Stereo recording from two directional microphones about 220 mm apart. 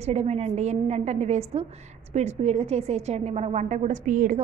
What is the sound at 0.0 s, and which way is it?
A woman's voice, 30° right (ahead or behind).